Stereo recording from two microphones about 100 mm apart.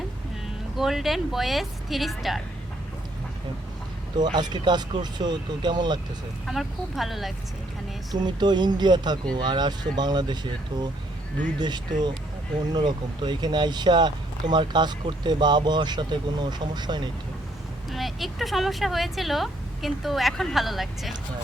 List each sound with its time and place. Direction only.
0.8 s speech: centre (ahead or behind)
4.2 s speech: 45° right (ahead or behind)
6.4 s speech: centre (ahead or behind)
8.1 s speech: 45° right (ahead or behind)
11.6 s speech: 45° right (ahead or behind)
17.9 s speech: centre (ahead or behind)